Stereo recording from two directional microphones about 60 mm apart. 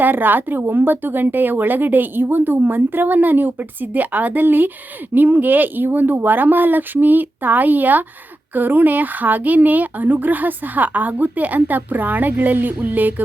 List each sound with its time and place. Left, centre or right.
0.0 s speech: right